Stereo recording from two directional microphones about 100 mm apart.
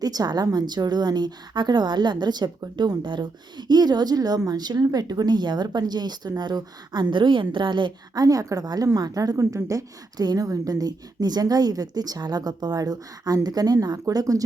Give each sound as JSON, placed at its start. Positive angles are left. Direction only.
{"t": 0.0, "sound": "a woman's voice", "side_deg": -40}
{"t": 8.2, "sound": "a woman's voice", "side_deg": -35}